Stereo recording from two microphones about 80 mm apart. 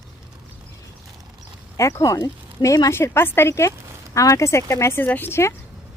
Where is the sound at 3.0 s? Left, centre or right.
Left.